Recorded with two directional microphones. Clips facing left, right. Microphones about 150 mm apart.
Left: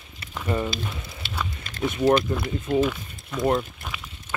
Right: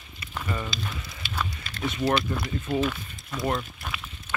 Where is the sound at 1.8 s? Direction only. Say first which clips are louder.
Left 5 dB; 20° left (ahead or behind).